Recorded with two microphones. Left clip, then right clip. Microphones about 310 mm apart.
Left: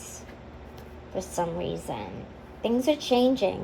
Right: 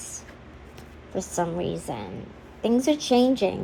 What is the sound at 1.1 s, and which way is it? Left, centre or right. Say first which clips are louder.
A woman's voice: right 2 dB; right.